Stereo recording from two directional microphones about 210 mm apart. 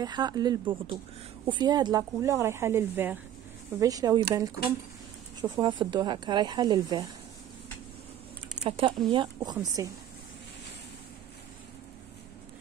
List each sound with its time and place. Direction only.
0.0 s speech: 20° right (ahead or behind)
5.4 s speech: 20° right (ahead or behind)
8.6 s speech: 25° right (ahead or behind)